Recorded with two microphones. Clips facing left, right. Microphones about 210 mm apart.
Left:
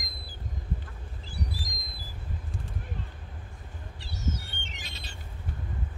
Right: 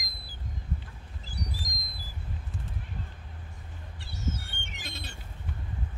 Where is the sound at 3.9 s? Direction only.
55° right (ahead or behind).